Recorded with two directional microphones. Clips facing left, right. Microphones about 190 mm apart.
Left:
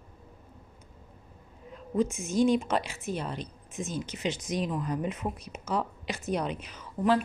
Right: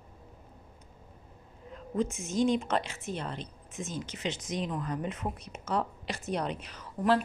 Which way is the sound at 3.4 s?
20° right (ahead or behind).